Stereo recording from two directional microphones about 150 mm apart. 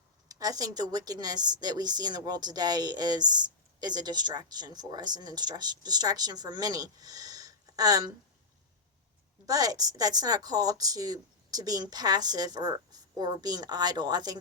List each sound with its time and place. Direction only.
0.3 s a woman's voice: 25° right (ahead or behind)
9.5 s a woman's voice: 25° right (ahead or behind)